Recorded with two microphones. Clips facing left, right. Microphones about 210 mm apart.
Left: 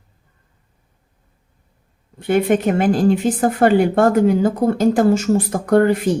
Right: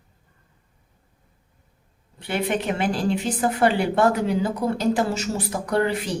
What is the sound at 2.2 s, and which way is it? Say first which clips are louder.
A woman's voice: left 9 dB; 50° left (ahead or behind).